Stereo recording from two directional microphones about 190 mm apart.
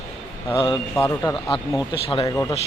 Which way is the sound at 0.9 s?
10° left (ahead or behind).